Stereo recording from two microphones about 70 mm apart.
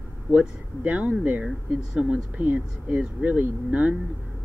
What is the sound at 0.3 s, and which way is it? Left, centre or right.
Speech, right.